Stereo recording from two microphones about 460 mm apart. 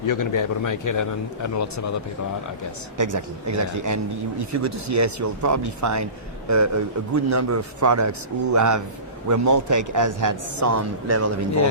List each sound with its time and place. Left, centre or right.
0.0 s a man's voice: left
3.0 s speech: right